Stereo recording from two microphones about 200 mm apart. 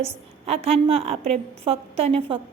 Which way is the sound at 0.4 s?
30° right (ahead or behind).